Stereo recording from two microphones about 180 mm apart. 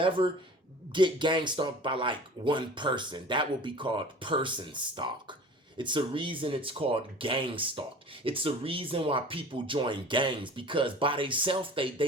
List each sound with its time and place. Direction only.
0.9 s speech: 25° right (ahead or behind)